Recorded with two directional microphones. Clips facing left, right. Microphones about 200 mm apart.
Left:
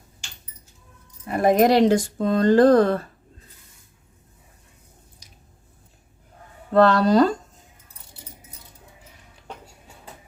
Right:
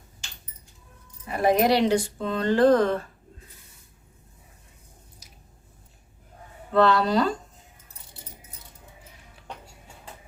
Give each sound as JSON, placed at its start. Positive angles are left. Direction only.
{"t": 1.4, "sound": "speech", "side_deg": 45}
{"t": 6.7, "sound": "speech", "side_deg": 45}